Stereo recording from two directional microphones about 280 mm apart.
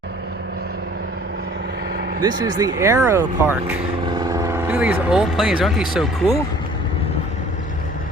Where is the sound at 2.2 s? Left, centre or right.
Centre.